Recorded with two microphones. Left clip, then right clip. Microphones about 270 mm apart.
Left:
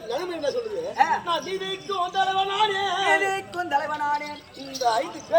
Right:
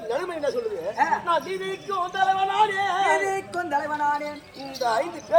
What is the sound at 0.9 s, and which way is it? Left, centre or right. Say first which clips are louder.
Speech: left 2 dB; centre.